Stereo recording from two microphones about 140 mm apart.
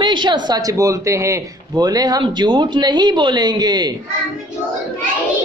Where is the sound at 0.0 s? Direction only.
35° right (ahead or behind).